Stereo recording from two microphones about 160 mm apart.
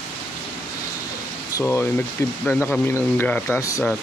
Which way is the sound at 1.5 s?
15° left (ahead or behind).